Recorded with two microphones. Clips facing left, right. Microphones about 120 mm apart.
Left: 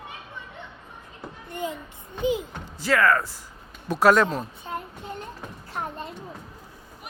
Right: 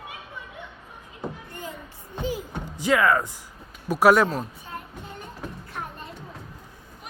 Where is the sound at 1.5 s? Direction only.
20° left (ahead or behind).